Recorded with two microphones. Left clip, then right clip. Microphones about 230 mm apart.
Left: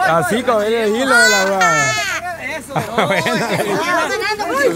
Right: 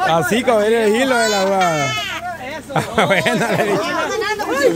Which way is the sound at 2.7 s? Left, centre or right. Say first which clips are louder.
Right 1 dB; centre.